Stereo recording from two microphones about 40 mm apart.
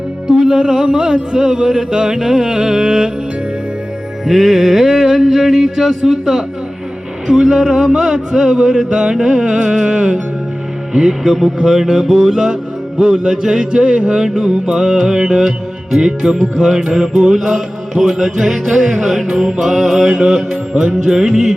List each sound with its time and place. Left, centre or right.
0.3 s music: centre
4.3 s music: centre
13.0 s speech: right
14.3 s music: centre